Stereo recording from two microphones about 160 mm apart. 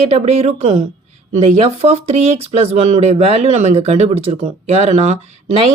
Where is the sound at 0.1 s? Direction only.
40° right (ahead or behind).